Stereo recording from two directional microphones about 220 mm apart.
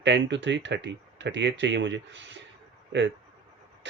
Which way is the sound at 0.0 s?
55° right (ahead or behind).